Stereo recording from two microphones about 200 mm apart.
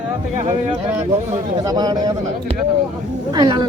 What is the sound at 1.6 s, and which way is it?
Speech, 20° right (ahead or behind).